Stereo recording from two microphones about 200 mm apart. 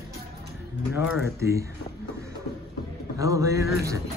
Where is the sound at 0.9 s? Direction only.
10° right (ahead or behind).